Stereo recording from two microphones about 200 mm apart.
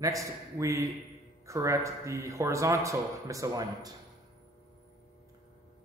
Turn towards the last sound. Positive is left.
turn(degrees=-15)  # may be behind; listen again after turning